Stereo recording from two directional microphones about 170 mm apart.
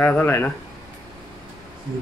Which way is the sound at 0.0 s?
10° left (ahead or behind).